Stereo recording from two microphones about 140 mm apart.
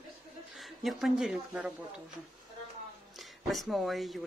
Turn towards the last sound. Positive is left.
turn(degrees=0)  # may be behind; listen again after turning